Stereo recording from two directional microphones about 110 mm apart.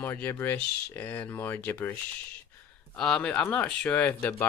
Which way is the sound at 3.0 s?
5° left (ahead or behind).